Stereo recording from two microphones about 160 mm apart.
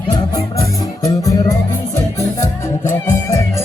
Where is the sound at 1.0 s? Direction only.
20° left (ahead or behind).